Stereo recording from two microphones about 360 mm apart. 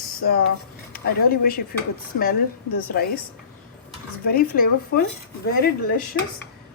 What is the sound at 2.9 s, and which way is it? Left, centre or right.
Speech, left.